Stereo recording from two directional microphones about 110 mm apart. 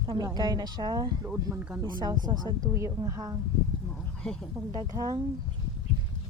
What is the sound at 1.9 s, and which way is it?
Speech, 40° right (ahead or behind).